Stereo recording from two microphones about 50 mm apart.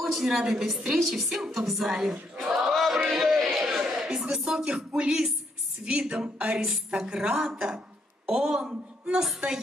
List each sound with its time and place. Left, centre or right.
0.0 s a woman's voice: centre
2.4 s battle cry: centre
3.1 s a sound: centre
3.5 s speech: centre
5.9 s music: centre
6.9 s a woman's voice: centre